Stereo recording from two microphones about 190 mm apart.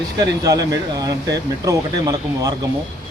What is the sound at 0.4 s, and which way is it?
Speech, 20° right (ahead or behind).